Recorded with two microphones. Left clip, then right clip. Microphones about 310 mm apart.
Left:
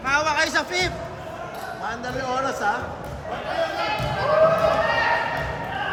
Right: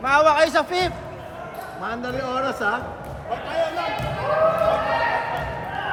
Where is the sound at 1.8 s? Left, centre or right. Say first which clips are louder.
Right 1 dB; right.